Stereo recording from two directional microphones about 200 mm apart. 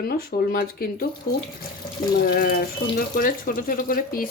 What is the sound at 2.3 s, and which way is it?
Speech, 45° left (ahead or behind).